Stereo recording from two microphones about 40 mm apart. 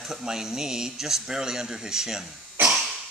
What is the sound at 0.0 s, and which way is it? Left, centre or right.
Speech, centre.